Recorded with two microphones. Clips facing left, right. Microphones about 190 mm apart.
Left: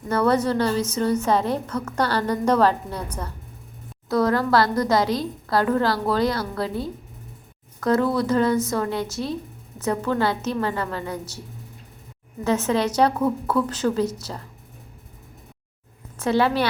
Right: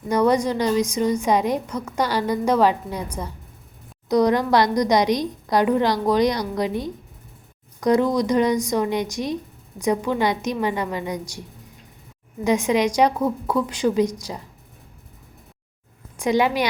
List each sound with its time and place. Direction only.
0.1 s a woman's voice: 15° right (ahead or behind)
12.5 s a woman's voice: 15° right (ahead or behind)
16.1 s a woman's voice: 15° right (ahead or behind)